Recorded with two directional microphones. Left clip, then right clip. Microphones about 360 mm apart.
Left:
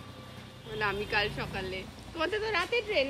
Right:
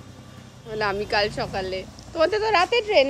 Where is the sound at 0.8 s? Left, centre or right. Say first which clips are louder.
Right 7 dB; centre.